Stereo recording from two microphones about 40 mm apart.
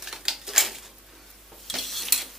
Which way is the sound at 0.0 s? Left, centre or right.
Centre.